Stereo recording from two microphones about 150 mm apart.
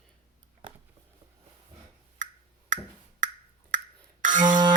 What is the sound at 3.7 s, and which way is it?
Music, 60° right (ahead or behind).